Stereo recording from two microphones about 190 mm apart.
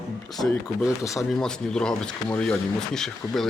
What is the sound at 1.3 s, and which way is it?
Speech, 5° left (ahead or behind).